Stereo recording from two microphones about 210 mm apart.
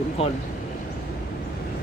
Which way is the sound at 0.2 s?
30° left (ahead or behind).